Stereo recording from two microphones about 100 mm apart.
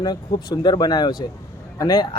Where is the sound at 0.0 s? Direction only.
45° left (ahead or behind).